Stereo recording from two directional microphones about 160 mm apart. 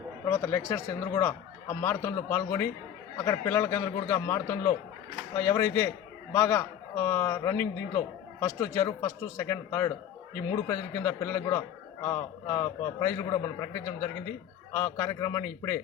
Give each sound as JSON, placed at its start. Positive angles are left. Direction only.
{"t": 0.3, "sound": "a man's voice", "side_deg": 15}